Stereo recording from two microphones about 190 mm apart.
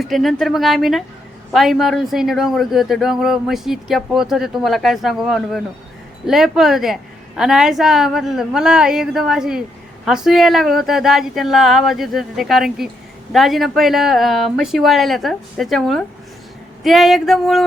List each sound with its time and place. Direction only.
0.0 s speech: centre (ahead or behind)